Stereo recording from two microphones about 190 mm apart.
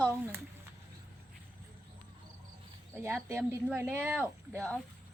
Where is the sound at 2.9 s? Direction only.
15° right (ahead or behind).